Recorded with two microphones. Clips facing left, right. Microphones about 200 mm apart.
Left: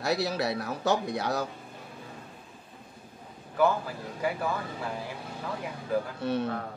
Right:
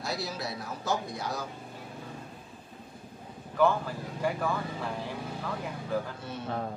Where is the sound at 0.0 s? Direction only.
65° left (ahead or behind).